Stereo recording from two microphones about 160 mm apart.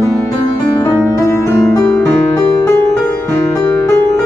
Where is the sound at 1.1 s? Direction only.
15° left (ahead or behind).